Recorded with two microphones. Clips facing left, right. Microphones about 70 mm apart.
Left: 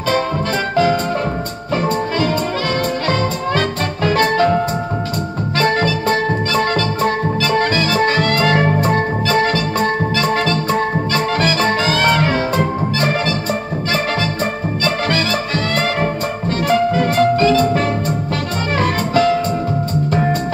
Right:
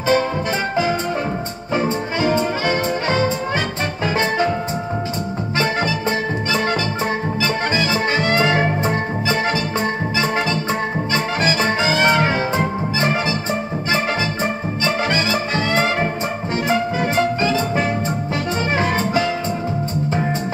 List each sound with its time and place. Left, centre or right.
1.8 s music: centre
5.6 s music: centre